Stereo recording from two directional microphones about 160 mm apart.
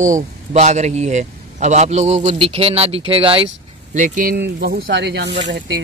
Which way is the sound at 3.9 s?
55° right (ahead or behind).